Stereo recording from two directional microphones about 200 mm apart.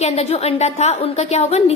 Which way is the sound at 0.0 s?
30° left (ahead or behind).